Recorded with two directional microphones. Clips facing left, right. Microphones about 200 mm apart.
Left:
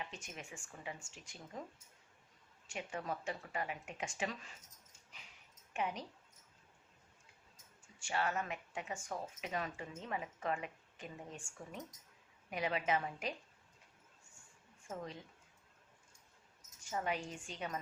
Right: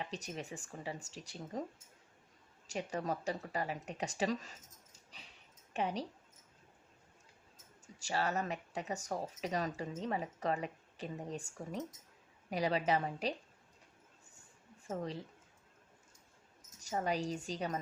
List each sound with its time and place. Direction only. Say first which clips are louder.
0.0 s speech: right 6 dB; 35° right (ahead or behind)
2.6 s a woman's voice: right 5 dB; 40° right (ahead or behind)
7.9 s speech: right 2 dB; 35° right (ahead or behind)
14.8 s speech: right 6 dB; 35° right (ahead or behind)
16.8 s speech: right 4 dB; 35° right (ahead or behind)